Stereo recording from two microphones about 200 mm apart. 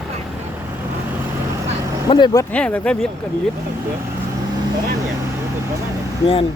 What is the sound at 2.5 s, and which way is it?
Speech, 5° left (ahead or behind).